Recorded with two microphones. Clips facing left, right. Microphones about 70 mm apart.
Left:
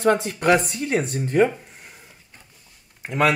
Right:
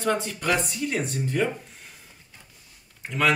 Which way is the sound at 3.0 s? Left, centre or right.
Left.